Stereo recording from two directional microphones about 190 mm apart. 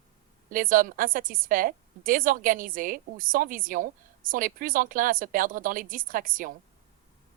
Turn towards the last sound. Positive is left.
turn(degrees=-45)  # may be behind; listen again after turning